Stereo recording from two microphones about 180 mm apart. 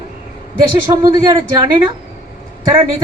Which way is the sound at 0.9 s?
20° right (ahead or behind).